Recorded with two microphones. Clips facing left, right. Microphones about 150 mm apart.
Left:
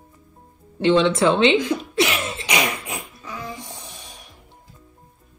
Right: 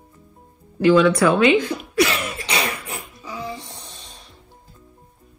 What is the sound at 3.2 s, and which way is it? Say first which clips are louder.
Music: right 2 dB; 10° right (ahead or behind).